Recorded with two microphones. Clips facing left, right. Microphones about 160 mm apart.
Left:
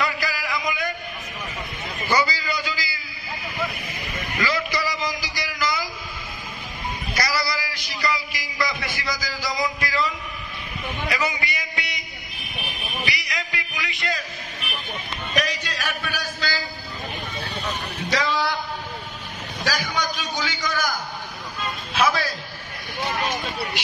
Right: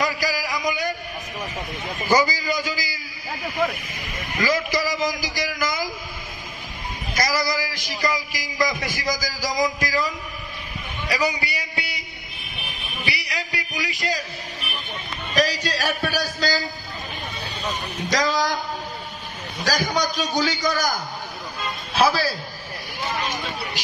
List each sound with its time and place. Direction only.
0.0 s a sound: 40° right (ahead or behind)
2.0 s a man's voice: 40° right (ahead or behind)
4.4 s a man's voice: 45° right (ahead or behind)
7.2 s a man's voice: 45° right (ahead or behind)
13.0 s a man's voice: 30° right (ahead or behind)
15.3 s a sound: 35° right (ahead or behind)
18.1 s a man's voice: 40° right (ahead or behind)
19.6 s a man's voice: 40° right (ahead or behind)
21.9 s a man's voice: 30° right (ahead or behind)